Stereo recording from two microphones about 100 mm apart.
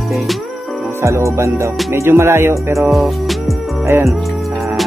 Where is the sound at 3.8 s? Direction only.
30° right (ahead or behind).